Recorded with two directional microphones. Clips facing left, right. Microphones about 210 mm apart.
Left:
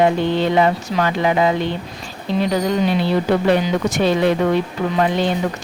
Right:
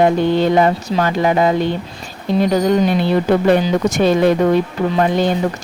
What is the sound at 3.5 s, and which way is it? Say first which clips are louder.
Speech: right 3 dB; 45° right (ahead or behind).